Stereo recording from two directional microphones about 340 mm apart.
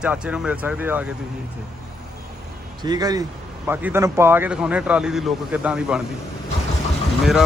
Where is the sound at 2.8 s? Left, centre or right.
Centre.